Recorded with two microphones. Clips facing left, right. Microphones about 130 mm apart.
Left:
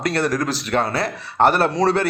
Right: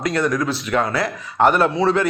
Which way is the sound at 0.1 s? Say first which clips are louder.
Right 2 dB; 35° left (ahead or behind).